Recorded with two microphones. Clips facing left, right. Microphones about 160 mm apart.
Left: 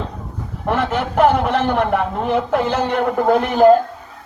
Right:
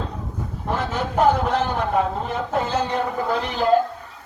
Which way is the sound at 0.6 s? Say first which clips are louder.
Left 6 dB; 65° left (ahead or behind).